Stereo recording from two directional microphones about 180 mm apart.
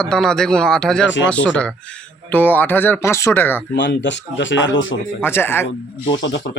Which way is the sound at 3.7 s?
75° left (ahead or behind).